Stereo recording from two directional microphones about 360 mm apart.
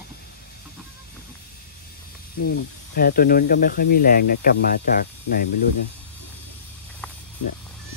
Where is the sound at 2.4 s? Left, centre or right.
Left.